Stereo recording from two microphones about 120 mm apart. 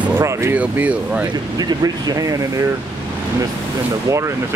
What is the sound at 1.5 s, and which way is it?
Speech, 35° right (ahead or behind).